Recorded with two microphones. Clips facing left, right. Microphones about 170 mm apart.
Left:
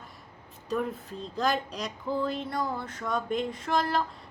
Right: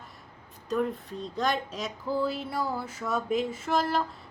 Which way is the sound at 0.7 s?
Centre (ahead or behind).